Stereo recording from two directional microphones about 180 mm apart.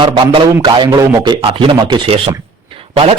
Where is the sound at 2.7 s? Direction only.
30° right (ahead or behind).